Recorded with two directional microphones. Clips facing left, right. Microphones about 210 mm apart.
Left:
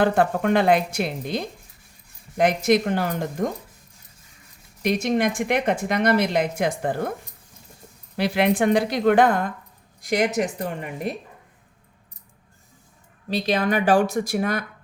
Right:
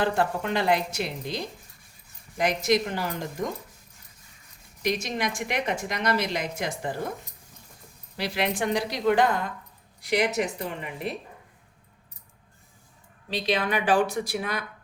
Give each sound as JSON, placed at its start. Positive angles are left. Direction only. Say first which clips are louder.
{"t": 0.0, "sound": "speech", "louder": "left 6 dB", "side_deg": 55}
{"t": 4.8, "sound": "speech", "louder": "left 7 dB", "side_deg": 55}
{"t": 8.1, "sound": "speech", "louder": "left 7 dB", "side_deg": 55}
{"t": 13.3, "sound": "speech", "louder": "left 4 dB", "side_deg": 45}